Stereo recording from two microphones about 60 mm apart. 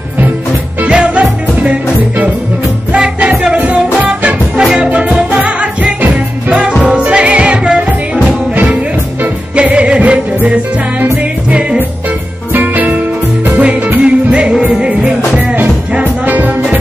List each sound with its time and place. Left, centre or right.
0.8 s music: centre
3.0 s music: centre
7.0 s music: right
9.6 s music: centre
12.5 s music: right
14.0 s music: centre
15.3 s music: right